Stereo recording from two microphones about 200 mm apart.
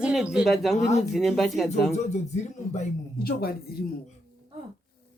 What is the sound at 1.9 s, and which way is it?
Speech, 35° left (ahead or behind).